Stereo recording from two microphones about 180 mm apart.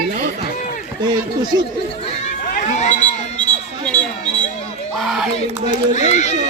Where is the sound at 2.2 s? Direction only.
40° left (ahead or behind).